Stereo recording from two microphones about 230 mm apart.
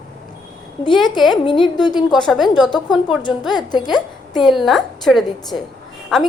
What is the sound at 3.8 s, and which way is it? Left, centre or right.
Speech, centre.